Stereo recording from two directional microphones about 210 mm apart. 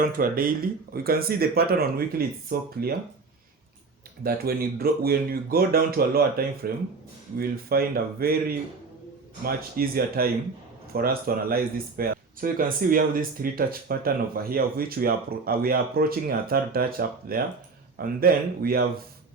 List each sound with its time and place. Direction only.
0.0 s speech: 45° right (ahead or behind)
4.2 s speech: 45° right (ahead or behind)